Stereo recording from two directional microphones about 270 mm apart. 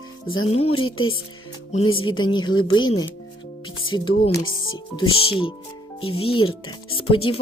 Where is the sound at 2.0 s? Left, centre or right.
Centre.